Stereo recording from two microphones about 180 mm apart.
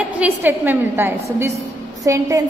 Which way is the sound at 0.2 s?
10° right (ahead or behind).